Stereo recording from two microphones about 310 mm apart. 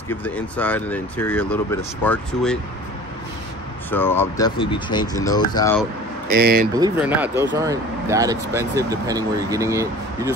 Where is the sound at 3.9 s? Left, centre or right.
Centre.